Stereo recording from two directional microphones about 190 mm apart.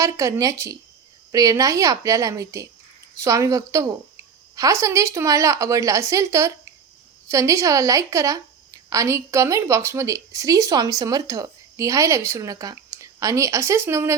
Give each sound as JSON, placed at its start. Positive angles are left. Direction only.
{"t": 0.0, "sound": "a woman's voice", "side_deg": -15}